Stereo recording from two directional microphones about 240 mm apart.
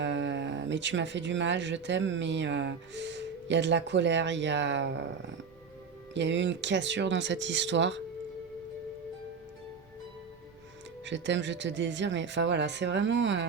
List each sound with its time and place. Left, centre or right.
0.0 s speech: right
6.1 s speech: right
11.0 s speech: right